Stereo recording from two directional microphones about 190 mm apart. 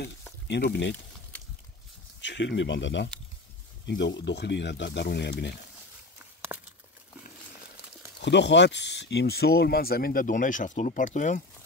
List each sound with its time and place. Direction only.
0.5 s speech: 65° left (ahead or behind)
2.2 s speech: 70° left (ahead or behind)
6.5 s a sound: 10° right (ahead or behind)
8.2 s speech: 65° left (ahead or behind); by 11.4 s 45° left (ahead or behind)